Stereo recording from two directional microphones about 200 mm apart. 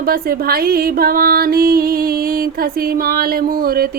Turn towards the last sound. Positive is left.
turn(degrees=-50)  # may be behind; listen again after turning